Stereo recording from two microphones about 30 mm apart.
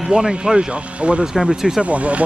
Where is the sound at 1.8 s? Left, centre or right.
Right.